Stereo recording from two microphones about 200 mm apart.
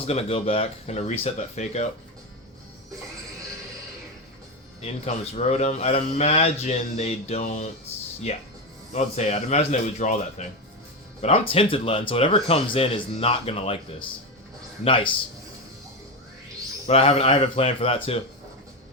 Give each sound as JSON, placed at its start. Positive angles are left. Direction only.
{"t": 0.1, "sound": "a man's voice", "side_deg": 30}
{"t": 4.8, "sound": "a man's voice", "side_deg": 35}
{"t": 8.9, "sound": "a man's voice", "side_deg": 35}
{"t": 14.8, "sound": "speech", "side_deg": 25}
{"t": 16.8, "sound": "speech", "side_deg": 30}